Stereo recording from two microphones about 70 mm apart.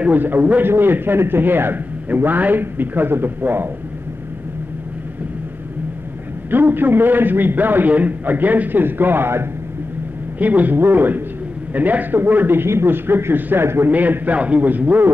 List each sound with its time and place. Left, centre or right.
0.0 s a man's voice: right
6.5 s a man's voice: right
10.4 s a man's voice: right